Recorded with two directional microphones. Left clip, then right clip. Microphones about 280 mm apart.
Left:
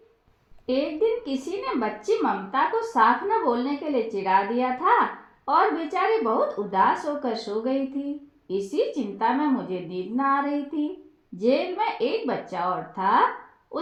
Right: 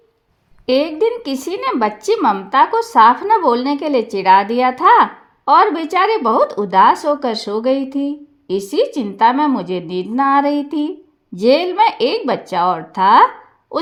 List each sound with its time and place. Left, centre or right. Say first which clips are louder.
0.6 s speech: right 9 dB; right